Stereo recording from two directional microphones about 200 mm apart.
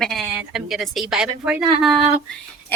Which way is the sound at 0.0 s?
Centre (ahead or behind).